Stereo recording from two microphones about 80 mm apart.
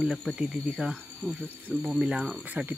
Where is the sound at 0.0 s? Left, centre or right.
Centre.